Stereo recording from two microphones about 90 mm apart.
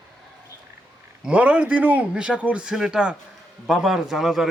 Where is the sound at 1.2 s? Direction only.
15° right (ahead or behind).